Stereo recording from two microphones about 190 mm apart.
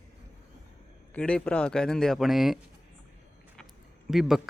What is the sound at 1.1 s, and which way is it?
A man's voice, 5° left (ahead or behind).